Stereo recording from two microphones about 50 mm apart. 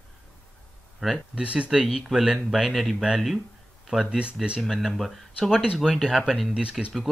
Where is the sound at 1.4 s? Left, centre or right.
Right.